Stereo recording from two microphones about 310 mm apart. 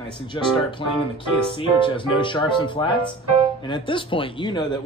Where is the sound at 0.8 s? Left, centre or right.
Centre.